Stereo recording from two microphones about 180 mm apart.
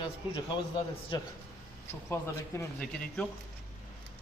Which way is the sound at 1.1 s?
25° left (ahead or behind).